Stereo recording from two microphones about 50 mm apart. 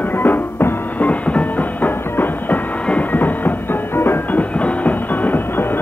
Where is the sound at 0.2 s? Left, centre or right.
Left.